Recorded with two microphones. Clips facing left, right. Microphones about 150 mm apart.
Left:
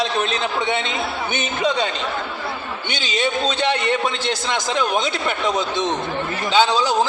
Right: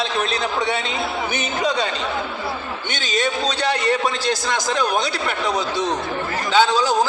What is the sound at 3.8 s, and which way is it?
Speech, 20° left (ahead or behind).